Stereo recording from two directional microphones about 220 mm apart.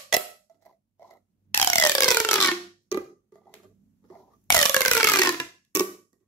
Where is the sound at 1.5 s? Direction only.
10° left (ahead or behind).